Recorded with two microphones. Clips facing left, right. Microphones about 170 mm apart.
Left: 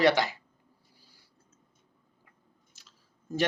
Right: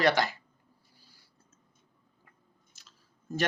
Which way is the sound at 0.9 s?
15° left (ahead or behind).